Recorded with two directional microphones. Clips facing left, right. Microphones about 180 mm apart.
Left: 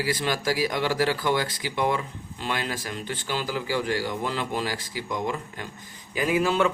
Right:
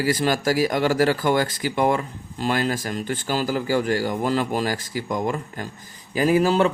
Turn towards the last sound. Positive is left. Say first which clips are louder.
# right 5 dB
turn(degrees=-35)  # may be behind; listen again after turning